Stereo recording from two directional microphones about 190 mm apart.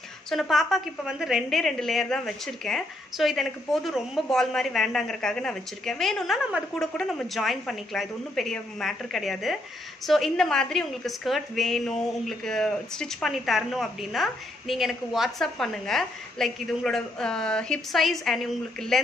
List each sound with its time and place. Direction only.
0.3 s a woman's voice: centre (ahead or behind)